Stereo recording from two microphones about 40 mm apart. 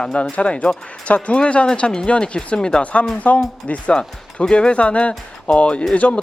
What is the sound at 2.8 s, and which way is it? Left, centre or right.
Speech, left.